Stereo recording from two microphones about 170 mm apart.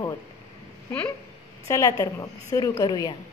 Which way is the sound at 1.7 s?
20° left (ahead or behind).